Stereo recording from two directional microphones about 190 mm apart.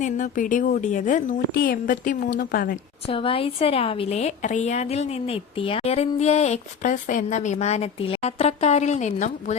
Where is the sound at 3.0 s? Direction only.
30° left (ahead or behind).